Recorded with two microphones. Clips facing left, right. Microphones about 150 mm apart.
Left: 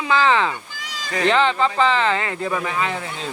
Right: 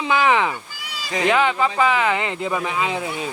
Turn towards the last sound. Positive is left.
turn(degrees=-10)  # may be behind; listen again after turning